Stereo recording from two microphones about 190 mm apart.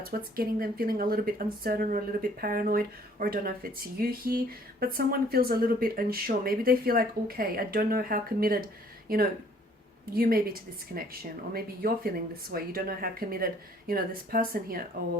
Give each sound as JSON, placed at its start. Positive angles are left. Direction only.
{"t": 0.0, "sound": "speech", "side_deg": -50}